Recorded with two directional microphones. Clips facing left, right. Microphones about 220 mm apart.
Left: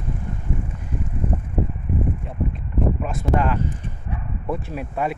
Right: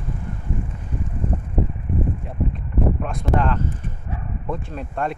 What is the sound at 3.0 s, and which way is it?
Speech, 5° left (ahead or behind).